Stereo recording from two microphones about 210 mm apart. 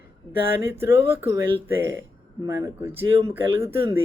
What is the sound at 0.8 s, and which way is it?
Speech, 10° right (ahead or behind).